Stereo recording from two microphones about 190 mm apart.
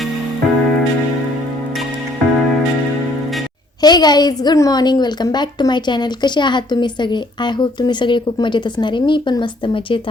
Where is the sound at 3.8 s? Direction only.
20° left (ahead or behind).